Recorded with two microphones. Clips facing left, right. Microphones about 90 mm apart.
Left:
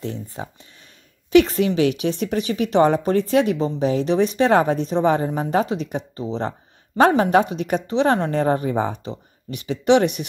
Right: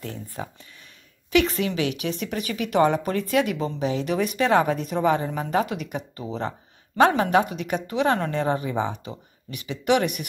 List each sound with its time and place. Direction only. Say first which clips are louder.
0.0 s speech: left 4 dB; 30° left (ahead or behind)